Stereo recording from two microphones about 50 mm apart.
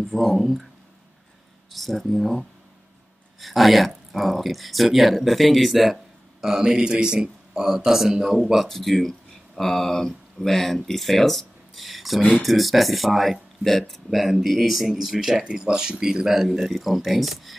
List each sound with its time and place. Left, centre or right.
0.1 s speech: centre
1.7 s speech: centre
15.4 s speech: centre